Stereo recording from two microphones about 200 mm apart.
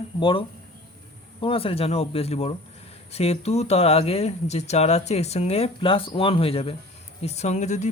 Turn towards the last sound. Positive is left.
turn(degrees=35)  # may be behind; listen again after turning